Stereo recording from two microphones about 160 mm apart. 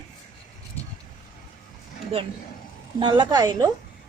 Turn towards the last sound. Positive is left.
turn(degrees=-25)  # may be behind; listen again after turning